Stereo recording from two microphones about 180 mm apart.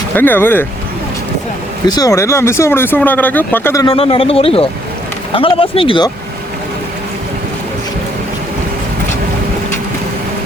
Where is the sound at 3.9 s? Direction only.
30° left (ahead or behind).